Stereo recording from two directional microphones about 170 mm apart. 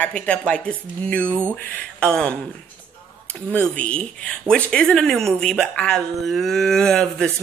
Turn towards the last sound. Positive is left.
turn(degrees=5)  # may be behind; listen again after turning